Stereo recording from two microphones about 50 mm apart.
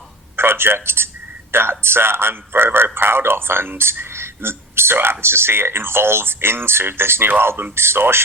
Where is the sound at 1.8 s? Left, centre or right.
Right.